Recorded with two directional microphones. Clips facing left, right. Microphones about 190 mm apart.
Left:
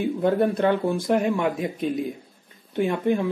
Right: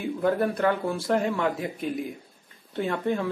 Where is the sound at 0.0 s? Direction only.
20° left (ahead or behind).